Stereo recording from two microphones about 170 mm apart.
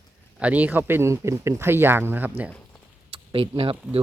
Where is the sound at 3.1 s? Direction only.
30° right (ahead or behind).